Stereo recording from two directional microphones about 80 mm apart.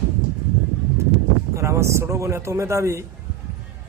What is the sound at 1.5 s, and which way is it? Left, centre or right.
Speech, right.